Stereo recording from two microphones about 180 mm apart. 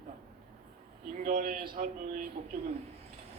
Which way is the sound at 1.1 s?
50° right (ahead or behind).